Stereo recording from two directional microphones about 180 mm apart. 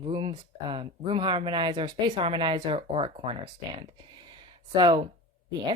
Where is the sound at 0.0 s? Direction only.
30° right (ahead or behind).